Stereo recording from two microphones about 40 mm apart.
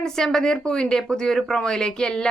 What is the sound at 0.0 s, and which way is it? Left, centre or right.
Speech, centre.